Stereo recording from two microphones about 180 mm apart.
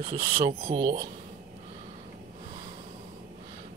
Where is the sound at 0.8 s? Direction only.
50° right (ahead or behind).